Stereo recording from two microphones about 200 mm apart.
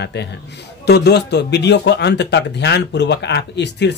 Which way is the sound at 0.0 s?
55° left (ahead or behind).